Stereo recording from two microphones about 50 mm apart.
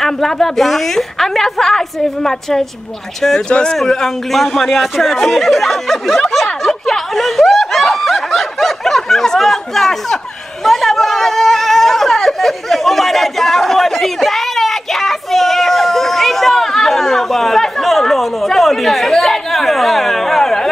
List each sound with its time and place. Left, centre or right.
0.0 s a woman's voice: centre
3.3 s a woman's voice: centre
3.7 s speech: centre
6.3 s snicker: centre
10.6 s a sound: centre